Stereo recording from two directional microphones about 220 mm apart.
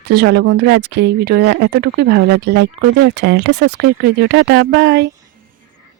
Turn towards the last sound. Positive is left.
turn(degrees=-50)  # may be behind; listen again after turning